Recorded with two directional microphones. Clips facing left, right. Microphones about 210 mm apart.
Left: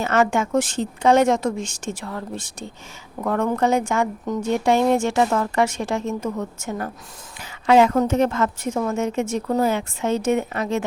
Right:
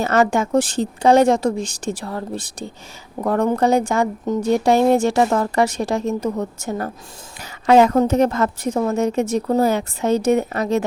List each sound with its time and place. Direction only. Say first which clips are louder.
0.0 s speech: right 2 dB; 35° right (ahead or behind)